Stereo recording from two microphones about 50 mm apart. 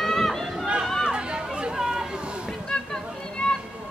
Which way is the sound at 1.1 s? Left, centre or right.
Centre.